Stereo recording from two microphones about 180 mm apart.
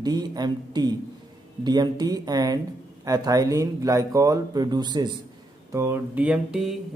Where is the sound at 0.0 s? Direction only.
20° right (ahead or behind).